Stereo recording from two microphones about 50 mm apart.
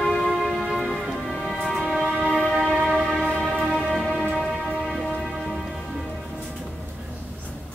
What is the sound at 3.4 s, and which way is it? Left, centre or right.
Music, centre.